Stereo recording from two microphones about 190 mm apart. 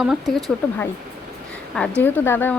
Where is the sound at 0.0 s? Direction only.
Centre (ahead or behind).